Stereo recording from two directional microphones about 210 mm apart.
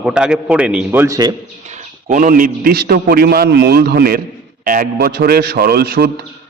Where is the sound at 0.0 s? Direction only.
5° right (ahead or behind).